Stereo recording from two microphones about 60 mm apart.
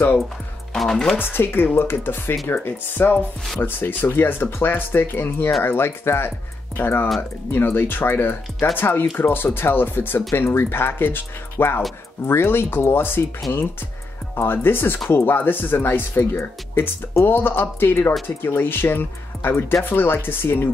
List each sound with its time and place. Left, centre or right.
0.7 s speech: centre
1.1 s speech: left
14.3 s speech: left